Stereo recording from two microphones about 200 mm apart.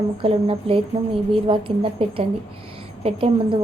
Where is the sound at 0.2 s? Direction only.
30° right (ahead or behind).